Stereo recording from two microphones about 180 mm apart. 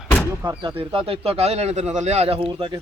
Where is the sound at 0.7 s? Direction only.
30° right (ahead or behind).